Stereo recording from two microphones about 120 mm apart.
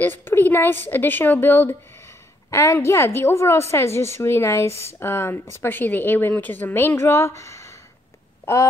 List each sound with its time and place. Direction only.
0.0 s a woman's voice: 15° left (ahead or behind)